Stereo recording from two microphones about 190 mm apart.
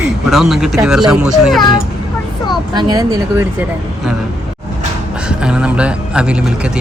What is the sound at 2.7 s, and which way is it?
Speech, 20° right (ahead or behind).